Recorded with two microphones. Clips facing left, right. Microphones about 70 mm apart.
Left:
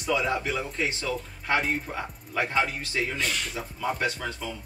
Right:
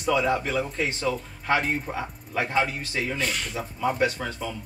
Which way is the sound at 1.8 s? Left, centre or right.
Centre.